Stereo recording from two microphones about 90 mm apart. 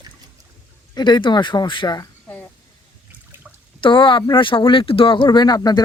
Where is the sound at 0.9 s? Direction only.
55° left (ahead or behind).